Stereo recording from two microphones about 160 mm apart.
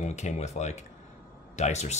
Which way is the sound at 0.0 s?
45° left (ahead or behind).